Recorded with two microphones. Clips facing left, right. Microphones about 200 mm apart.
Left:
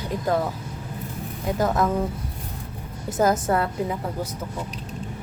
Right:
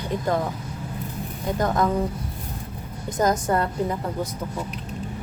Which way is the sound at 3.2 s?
5° left (ahead or behind).